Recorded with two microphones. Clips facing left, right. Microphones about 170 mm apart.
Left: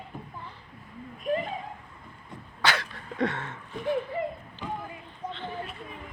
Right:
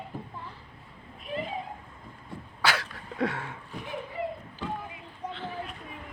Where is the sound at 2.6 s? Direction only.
5° right (ahead or behind).